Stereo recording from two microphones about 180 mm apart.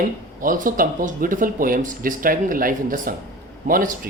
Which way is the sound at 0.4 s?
50° right (ahead or behind).